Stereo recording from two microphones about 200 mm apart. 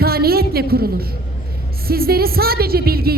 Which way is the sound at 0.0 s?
50° right (ahead or behind).